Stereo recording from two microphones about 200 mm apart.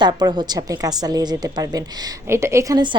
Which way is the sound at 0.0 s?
20° right (ahead or behind).